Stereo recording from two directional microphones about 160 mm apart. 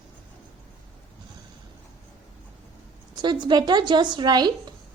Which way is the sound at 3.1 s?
25° right (ahead or behind).